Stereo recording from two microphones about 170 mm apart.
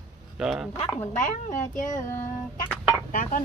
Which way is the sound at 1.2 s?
50° left (ahead or behind).